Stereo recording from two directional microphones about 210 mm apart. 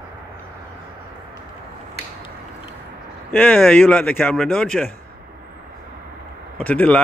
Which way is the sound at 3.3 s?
10° left (ahead or behind).